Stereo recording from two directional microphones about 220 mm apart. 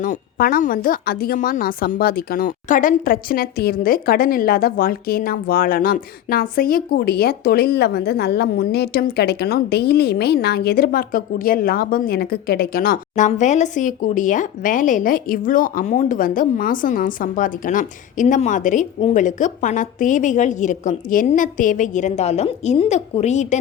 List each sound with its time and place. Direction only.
0.0 s a woman's voice: 40° left (ahead or behind)